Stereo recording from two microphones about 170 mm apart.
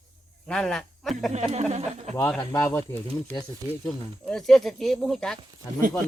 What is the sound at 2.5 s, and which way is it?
Cricket, 15° left (ahead or behind).